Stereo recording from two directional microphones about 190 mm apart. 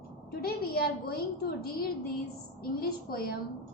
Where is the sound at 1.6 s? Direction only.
55° left (ahead or behind).